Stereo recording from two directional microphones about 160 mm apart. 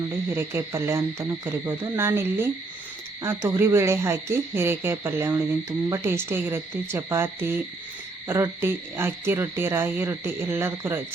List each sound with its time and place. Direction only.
0.3 s speech: 15° right (ahead or behind)